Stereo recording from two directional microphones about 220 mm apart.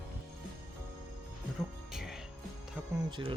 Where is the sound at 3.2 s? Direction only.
20° right (ahead or behind).